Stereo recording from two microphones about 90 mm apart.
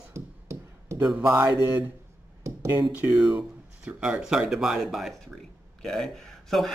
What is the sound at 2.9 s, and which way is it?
Speech, 15° right (ahead or behind).